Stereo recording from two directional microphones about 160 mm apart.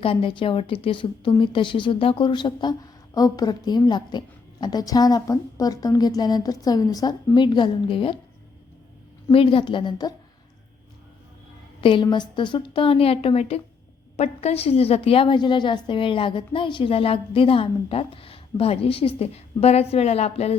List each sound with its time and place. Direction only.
0.0 s a woman's voice: 35° left (ahead or behind)
9.3 s a woman's voice: 35° left (ahead or behind)
11.8 s a woman's voice: 30° left (ahead or behind)